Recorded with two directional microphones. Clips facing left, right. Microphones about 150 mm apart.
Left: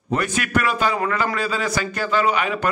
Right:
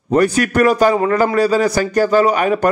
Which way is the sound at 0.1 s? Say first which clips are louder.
Right 8 dB; 40° right (ahead or behind).